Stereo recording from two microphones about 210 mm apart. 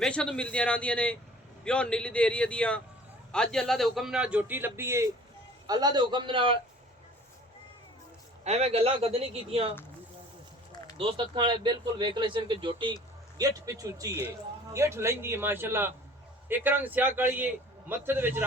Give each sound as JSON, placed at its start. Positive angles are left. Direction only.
{"t": 0.0, "sound": "a man's voice", "side_deg": 5}
{"t": 8.4, "sound": "speech", "side_deg": -30}
{"t": 10.9, "sound": "a man's voice", "side_deg": -25}